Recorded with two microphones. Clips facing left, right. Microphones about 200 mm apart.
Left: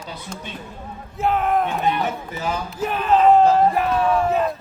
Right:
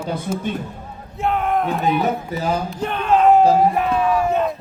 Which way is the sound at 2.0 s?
35° right (ahead or behind).